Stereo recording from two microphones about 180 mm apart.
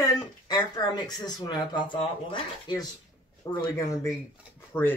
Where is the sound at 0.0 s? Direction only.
20° left (ahead or behind).